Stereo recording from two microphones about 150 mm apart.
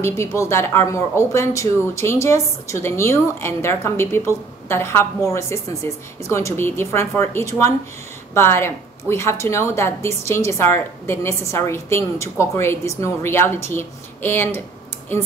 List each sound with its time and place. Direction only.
0.0 s a woman's voice: 20° left (ahead or behind)